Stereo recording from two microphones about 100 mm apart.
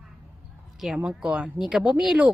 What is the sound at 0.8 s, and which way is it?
Speech, 5° right (ahead or behind).